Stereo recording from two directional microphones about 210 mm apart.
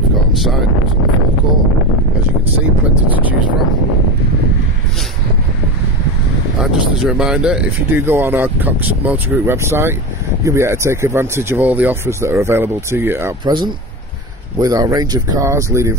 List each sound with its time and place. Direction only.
6.6 s speech: 5° right (ahead or behind)
14.6 s speech: 15° right (ahead or behind)